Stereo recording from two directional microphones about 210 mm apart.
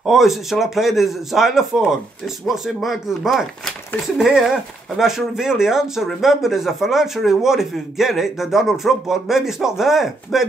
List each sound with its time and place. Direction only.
0.0 s speech: centre (ahead or behind)